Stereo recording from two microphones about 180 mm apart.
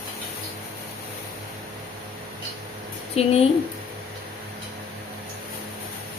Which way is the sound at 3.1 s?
35° left (ahead or behind).